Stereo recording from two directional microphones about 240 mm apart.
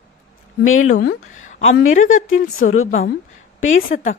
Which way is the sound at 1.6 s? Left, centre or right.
Left.